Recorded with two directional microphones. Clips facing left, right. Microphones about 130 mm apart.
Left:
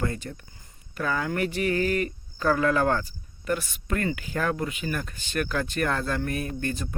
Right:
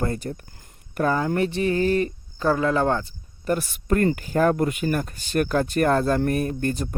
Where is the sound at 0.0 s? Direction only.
35° right (ahead or behind).